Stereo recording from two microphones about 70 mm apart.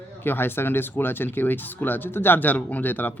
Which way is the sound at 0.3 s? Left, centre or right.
Left.